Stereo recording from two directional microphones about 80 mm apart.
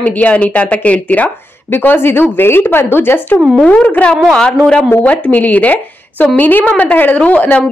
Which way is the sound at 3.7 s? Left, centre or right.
Centre.